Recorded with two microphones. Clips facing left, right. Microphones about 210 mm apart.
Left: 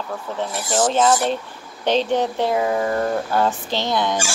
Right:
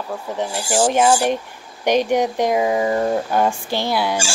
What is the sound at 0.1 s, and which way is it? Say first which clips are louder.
Speech: right 2 dB; 15° right (ahead or behind).